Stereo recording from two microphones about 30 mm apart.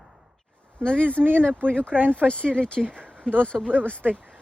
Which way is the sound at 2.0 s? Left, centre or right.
Right.